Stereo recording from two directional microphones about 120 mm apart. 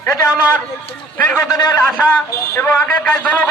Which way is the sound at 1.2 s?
15° left (ahead or behind).